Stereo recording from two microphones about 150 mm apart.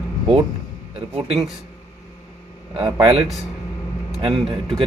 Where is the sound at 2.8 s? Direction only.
35° right (ahead or behind).